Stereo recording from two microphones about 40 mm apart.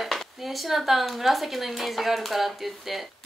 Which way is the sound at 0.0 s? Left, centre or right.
Centre.